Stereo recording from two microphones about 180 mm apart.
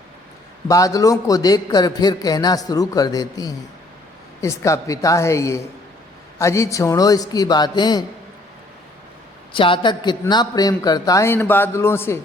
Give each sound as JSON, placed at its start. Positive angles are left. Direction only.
{"t": 0.7, "sound": "a man's voice", "side_deg": 20}
{"t": 9.5, "sound": "a man's voice", "side_deg": 30}